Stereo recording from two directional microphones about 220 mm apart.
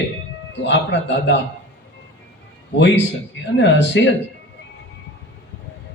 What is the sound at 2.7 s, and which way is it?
Speech, 55° left (ahead or behind).